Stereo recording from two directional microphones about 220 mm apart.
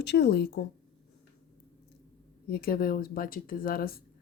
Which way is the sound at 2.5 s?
45° left (ahead or behind).